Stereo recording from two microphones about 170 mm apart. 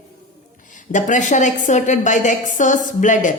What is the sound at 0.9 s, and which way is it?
Speech, 45° left (ahead or behind).